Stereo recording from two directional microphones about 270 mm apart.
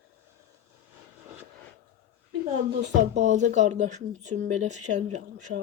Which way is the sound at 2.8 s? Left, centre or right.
Right.